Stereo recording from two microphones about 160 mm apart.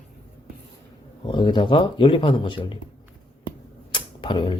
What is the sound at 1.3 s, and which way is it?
Speech, 30° left (ahead or behind).